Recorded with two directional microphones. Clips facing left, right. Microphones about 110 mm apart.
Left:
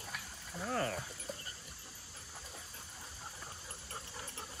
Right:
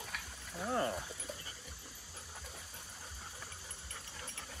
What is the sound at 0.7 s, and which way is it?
Speech, 15° right (ahead or behind).